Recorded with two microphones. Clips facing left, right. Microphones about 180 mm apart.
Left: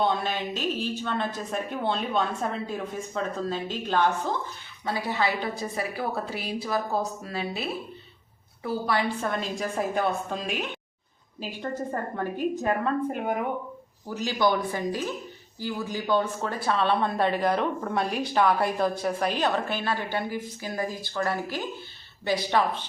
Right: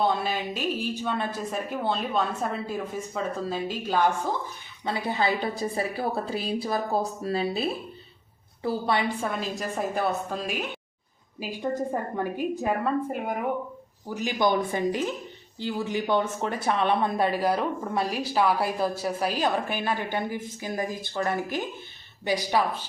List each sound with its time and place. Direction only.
0.1 s speech: 5° right (ahead or behind)
4.9 s a woman's voice: 25° right (ahead or behind)
9.2 s a woman's voice: 5° right (ahead or behind)
14.1 s a woman's voice: 15° right (ahead or behind)